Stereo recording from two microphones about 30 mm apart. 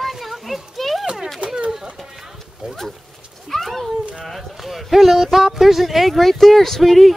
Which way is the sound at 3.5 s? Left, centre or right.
Centre.